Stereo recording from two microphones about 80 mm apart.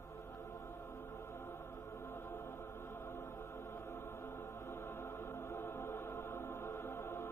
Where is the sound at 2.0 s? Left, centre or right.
Left.